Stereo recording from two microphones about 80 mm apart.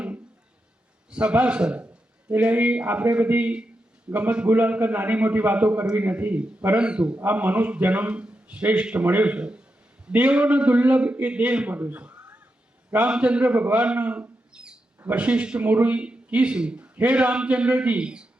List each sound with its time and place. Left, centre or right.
1.1 s a man's voice: centre